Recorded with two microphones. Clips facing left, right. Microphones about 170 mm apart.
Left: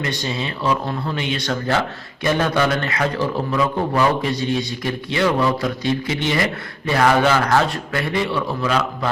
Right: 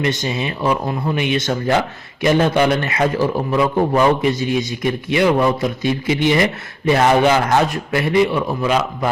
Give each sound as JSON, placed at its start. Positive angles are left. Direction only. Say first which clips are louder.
{"t": 0.0, "sound": "a man's voice", "louder": "right 4 dB", "side_deg": -20}